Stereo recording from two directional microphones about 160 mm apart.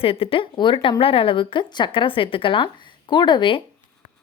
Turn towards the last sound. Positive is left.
turn(degrees=30)  # may be behind; listen again after turning